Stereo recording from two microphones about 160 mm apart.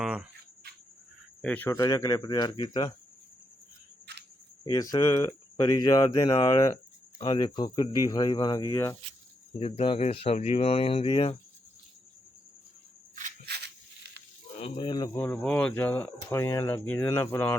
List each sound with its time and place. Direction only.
0.0 s cricket: 5° right (ahead or behind)
1.4 s speech: 10° left (ahead or behind)
1.7 s speech: 20° left (ahead or behind)
4.1 s a sound: 90° right
4.6 s speech: 25° left (ahead or behind)
9.6 s speech: 35° left (ahead or behind)
13.4 s a sound: 90° right
14.6 s speech: 30° left (ahead or behind)
15.2 s speech: 10° left (ahead or behind)